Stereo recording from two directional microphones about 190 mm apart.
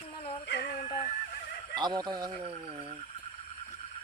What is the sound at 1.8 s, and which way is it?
Speech, 20° right (ahead or behind).